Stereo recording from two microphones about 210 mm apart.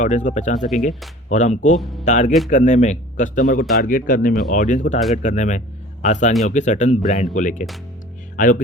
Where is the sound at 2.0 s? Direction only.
35° left (ahead or behind).